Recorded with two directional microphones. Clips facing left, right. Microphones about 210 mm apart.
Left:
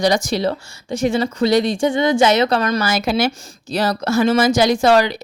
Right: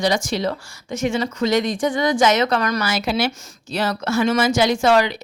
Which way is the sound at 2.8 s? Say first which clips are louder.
Left 3 dB; 45° left (ahead or behind).